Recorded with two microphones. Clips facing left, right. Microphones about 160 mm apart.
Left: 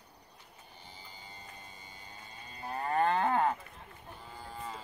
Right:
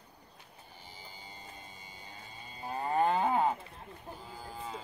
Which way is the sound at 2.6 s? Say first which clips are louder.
Right 1 dB; 15° right (ahead or behind).